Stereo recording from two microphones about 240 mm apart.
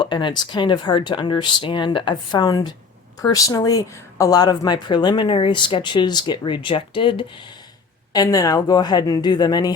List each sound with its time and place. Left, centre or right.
0.0 s speech: centre